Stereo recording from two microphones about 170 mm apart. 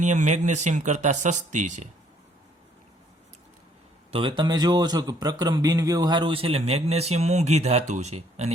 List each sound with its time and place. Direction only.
0.0 s speech: 45° right (ahead or behind)
4.1 s a man's voice: 30° right (ahead or behind)